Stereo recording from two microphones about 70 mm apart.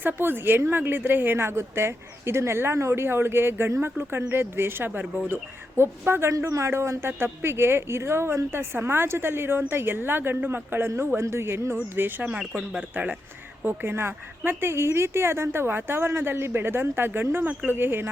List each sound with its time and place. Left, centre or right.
0.0 s a woman's voice: right
12.2 s speech: centre
13.7 s a woman's voice: right